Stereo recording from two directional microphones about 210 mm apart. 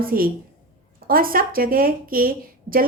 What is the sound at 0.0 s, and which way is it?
A woman's voice, 45° right (ahead or behind).